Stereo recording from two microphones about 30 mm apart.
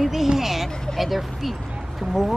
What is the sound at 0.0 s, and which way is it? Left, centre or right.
Speech, centre.